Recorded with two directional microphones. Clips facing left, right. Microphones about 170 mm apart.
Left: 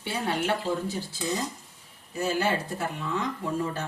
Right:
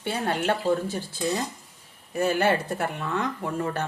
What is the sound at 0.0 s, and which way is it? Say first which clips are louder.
Speech: right 2 dB; 55° right (ahead or behind).